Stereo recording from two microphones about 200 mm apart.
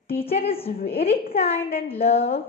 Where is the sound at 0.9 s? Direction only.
30° left (ahead or behind).